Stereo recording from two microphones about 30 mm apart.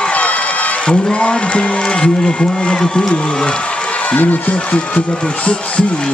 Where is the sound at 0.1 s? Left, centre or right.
Left.